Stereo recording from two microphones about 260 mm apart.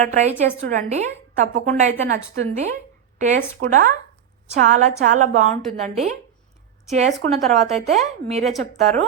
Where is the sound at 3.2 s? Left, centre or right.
Right.